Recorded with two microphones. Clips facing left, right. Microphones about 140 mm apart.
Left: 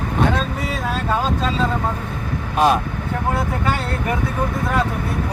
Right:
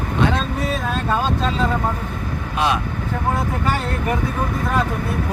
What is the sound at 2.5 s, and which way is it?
Speech, 45° left (ahead or behind).